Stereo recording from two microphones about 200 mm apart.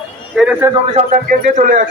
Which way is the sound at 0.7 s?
35° right (ahead or behind).